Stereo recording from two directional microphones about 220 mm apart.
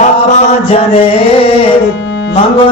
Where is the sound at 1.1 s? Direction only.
25° left (ahead or behind).